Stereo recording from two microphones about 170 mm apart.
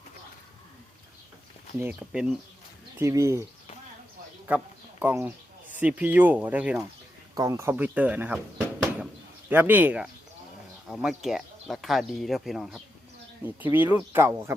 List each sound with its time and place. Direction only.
1.8 s speech: 10° right (ahead or behind)
4.4 s a sound: 10° right (ahead or behind)
5.8 s speech: 10° right (ahead or behind)
7.3 s speech: 15° right (ahead or behind)
8.8 s a sound: 10° right (ahead or behind)
9.5 s speech: 10° right (ahead or behind)
13.4 s speech: 10° right (ahead or behind)